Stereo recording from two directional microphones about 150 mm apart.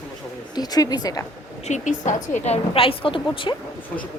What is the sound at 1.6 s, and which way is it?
A woman's voice, 55° left (ahead or behind).